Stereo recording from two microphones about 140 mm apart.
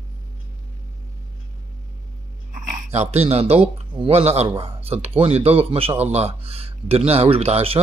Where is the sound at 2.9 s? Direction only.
50° right (ahead or behind).